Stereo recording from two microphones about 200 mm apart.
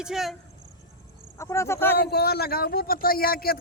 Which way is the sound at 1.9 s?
50° left (ahead or behind).